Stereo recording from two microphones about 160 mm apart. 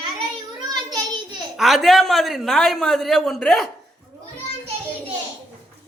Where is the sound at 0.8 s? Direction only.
25° right (ahead or behind).